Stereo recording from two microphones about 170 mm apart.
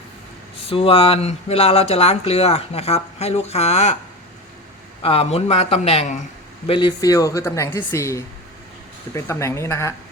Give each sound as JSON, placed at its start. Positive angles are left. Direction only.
{"t": 0.7, "sound": "speech", "side_deg": 35}
{"t": 5.0, "sound": "speech", "side_deg": 35}
{"t": 6.7, "sound": "speech", "side_deg": 25}